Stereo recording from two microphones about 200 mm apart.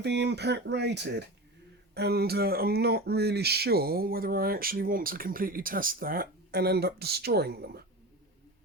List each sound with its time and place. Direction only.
0.0 s speech: 55° right (ahead or behind)